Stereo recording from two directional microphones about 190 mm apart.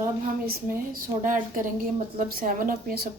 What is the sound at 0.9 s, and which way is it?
A woman's voice, 45° right (ahead or behind).